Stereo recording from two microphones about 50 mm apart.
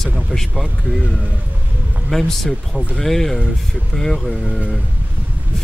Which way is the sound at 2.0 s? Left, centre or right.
Centre.